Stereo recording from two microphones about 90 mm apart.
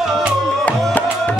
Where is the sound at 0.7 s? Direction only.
20° left (ahead or behind).